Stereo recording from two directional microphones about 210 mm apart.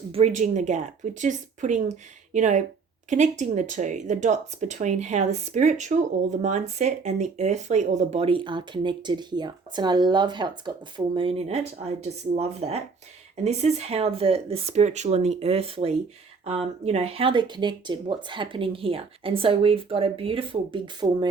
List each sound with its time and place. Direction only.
0.1 s speech: 30° right (ahead or behind)